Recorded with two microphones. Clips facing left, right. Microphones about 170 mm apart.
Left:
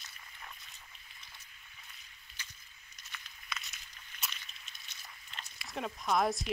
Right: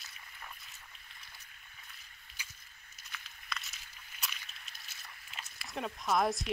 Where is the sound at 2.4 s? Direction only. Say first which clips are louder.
Even; 10° right (ahead or behind).